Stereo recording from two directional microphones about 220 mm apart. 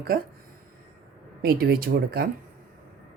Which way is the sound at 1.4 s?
45° right (ahead or behind).